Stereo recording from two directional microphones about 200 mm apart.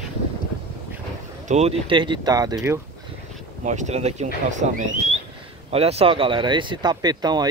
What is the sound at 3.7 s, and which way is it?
Speech, 35° right (ahead or behind).